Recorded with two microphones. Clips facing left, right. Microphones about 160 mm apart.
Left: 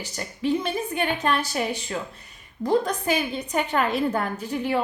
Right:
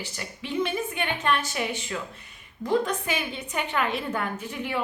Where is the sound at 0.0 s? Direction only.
40° left (ahead or behind).